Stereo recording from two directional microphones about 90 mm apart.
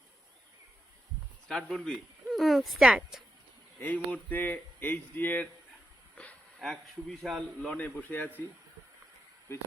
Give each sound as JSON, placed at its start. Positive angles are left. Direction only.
{"t": 1.5, "sound": "speech", "side_deg": 10}
{"t": 3.8, "sound": "speech", "side_deg": 20}
{"t": 6.1, "sound": "a sound", "side_deg": 10}
{"t": 6.7, "sound": "a man's voice", "side_deg": 0}
{"t": 7.8, "sound": "speech", "side_deg": 20}